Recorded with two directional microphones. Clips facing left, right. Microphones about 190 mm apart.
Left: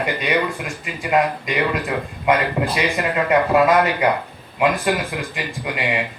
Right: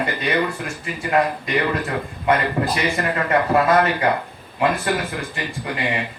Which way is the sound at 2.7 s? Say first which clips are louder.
Left 1 dB; 15° left (ahead or behind).